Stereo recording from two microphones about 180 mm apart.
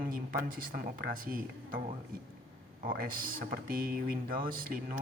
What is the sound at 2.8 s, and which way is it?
Speech, 55° right (ahead or behind).